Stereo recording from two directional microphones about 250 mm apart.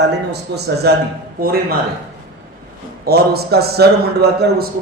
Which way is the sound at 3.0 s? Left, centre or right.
Right.